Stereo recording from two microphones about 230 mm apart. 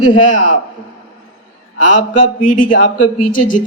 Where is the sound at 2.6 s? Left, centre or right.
Left.